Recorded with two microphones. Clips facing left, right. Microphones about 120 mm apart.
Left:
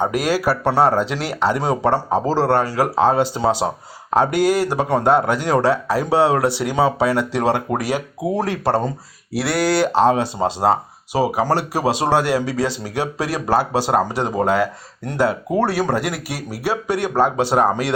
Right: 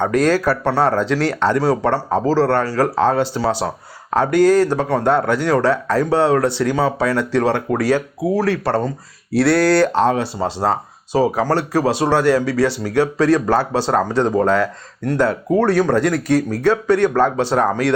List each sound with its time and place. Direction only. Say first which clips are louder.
0.0 s speech: right 3 dB; 10° left (ahead or behind)
9.3 s speech: right 5 dB; 5° left (ahead or behind)